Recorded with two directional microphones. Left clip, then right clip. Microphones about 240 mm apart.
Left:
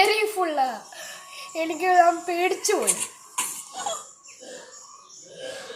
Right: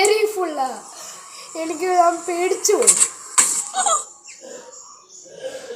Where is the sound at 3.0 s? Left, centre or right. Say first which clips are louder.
Right 11 dB; right.